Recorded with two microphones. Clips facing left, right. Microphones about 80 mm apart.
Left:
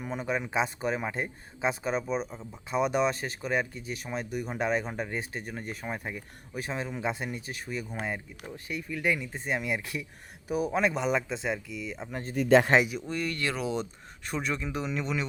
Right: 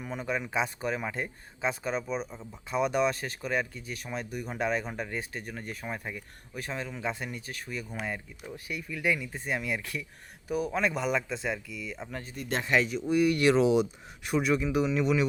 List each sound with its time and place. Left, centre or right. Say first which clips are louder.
0.0 s speech: left 1 dB; centre
12.7 s speech: left 3 dB; left
13.1 s speech: right 8 dB; centre
14.3 s speech: right 5 dB; centre